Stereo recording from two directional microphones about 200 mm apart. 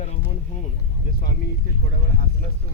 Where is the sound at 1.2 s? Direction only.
45° left (ahead or behind).